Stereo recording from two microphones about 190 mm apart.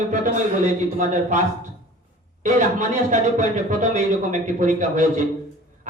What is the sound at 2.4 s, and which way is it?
Speech, 40° right (ahead or behind).